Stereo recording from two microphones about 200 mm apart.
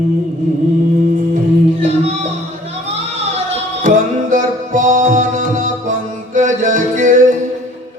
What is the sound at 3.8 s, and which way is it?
Music, 40° right (ahead or behind).